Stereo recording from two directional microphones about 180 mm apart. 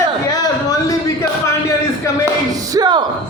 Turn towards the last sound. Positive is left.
turn(degrees=-25)  # may be behind; listen again after turning